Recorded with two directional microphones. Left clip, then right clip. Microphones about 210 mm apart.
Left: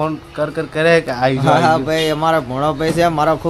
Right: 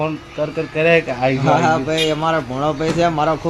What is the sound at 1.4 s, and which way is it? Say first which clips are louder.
A man's voice: left 3 dB; 20° left (ahead or behind).